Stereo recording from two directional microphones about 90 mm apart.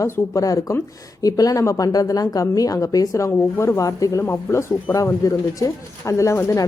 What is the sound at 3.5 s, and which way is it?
Speech, 30° left (ahead or behind).